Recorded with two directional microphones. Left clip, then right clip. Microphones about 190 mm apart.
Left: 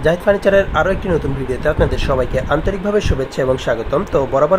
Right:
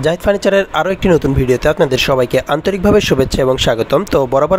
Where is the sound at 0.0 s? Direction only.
40° right (ahead or behind).